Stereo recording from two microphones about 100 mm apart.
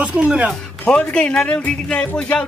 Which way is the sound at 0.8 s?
10° left (ahead or behind).